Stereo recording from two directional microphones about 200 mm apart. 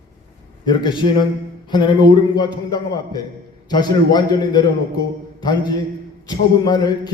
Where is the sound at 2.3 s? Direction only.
20° left (ahead or behind).